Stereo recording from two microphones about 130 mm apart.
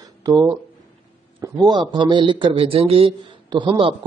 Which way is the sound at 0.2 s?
30° right (ahead or behind).